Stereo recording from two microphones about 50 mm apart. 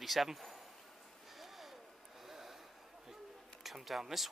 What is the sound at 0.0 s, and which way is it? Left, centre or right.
Speech, centre.